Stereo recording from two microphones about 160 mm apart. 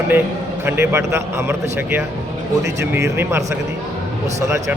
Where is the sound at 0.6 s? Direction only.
15° right (ahead or behind).